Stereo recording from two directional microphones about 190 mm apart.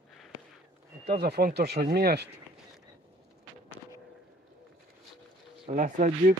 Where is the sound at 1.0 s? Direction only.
60° right (ahead or behind).